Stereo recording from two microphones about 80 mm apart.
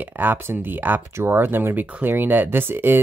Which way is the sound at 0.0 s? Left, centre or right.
Right.